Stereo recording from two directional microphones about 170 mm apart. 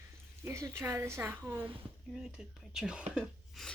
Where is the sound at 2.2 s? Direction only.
5° right (ahead or behind).